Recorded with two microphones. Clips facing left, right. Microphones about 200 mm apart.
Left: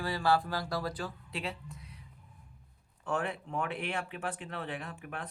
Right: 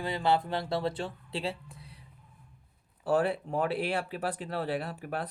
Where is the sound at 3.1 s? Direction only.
35° right (ahead or behind).